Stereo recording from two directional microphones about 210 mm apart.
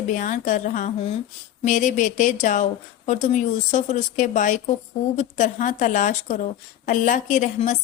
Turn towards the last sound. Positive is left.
turn(degrees=35)  # may be behind; listen again after turning